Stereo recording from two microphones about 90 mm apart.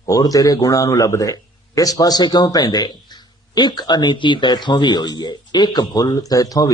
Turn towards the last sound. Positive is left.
turn(degrees=40)  # may be behind; listen again after turning